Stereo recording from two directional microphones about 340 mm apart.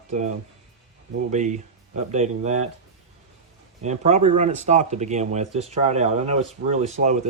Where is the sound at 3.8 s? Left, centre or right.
Centre.